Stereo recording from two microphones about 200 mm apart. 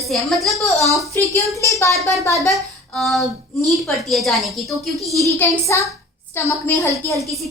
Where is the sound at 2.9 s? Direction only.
Centre (ahead or behind).